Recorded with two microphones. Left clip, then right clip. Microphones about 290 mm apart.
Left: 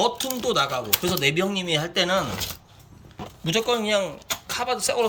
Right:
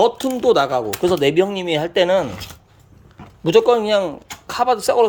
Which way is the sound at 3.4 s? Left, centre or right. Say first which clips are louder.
Right 10 dB; centre.